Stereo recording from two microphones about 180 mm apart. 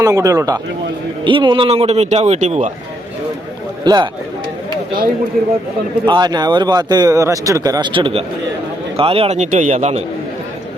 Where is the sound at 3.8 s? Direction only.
20° right (ahead or behind).